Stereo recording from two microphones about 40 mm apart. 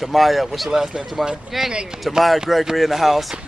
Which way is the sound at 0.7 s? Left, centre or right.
Centre.